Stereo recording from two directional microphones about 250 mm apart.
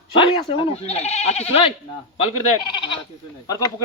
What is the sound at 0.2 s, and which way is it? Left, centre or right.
Speech, left.